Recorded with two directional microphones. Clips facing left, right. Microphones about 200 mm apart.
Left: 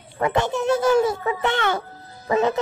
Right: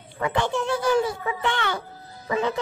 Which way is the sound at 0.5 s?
20° left (ahead or behind).